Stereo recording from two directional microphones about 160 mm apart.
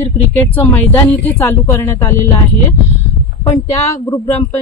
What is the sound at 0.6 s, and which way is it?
A woman's voice, 10° left (ahead or behind).